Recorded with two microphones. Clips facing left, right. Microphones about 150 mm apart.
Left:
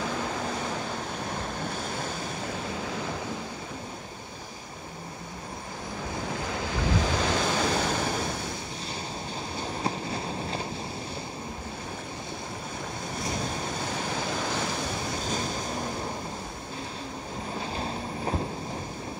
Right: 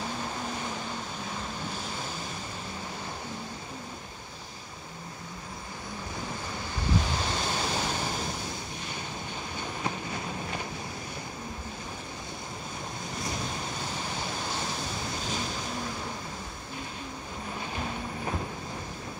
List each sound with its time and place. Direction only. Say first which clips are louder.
6.5 s waves: left 2 dB; 90° left; by 8.3 s 60° left (ahead or behind)
9.6 s train: left 3 dB; 30° left (ahead or behind)
14.4 s waves: left 4 dB; 70° left (ahead or behind)
17.6 s vehicle: left 2 dB; 30° left (ahead or behind)